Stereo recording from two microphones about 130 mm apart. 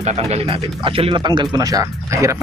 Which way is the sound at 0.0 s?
60° right (ahead or behind).